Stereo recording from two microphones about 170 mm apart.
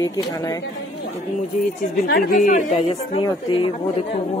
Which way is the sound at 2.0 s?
60° left (ahead or behind).